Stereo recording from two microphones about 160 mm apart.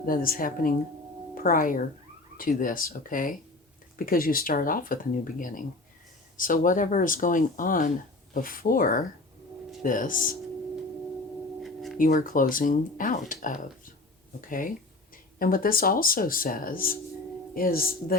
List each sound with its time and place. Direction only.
0.0 s speech: 65° left (ahead or behind)
11.6 s a sound: centre (ahead or behind)
11.9 s speech: 55° left (ahead or behind)
15.4 s speech: 60° left (ahead or behind)